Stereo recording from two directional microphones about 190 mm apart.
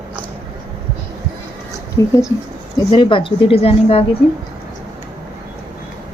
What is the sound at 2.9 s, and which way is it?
A woman's voice, 25° left (ahead or behind).